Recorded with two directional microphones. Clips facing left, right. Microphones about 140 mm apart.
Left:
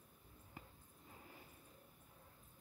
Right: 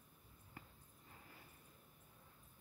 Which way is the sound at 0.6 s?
15° left (ahead or behind).